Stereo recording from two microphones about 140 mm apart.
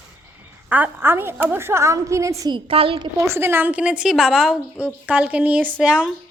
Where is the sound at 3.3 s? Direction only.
15° right (ahead or behind).